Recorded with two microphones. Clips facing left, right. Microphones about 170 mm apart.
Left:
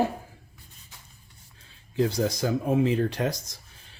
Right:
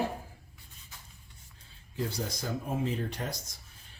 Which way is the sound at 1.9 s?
90° left.